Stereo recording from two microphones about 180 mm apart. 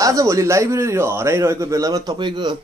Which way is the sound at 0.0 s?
20° right (ahead or behind).